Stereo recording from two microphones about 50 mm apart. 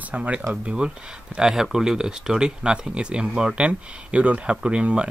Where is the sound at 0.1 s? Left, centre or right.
Right.